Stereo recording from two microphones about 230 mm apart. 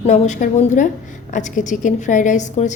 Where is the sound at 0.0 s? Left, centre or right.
Left.